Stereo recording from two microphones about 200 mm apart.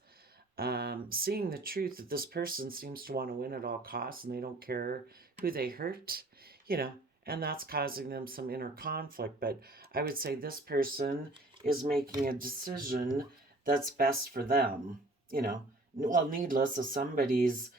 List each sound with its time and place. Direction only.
0.5 s speech: 50° right (ahead or behind)